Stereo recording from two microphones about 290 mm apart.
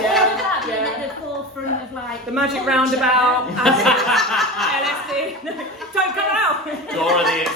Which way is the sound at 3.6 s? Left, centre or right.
Centre.